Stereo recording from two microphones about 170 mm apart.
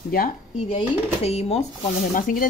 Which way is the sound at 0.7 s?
35° left (ahead or behind).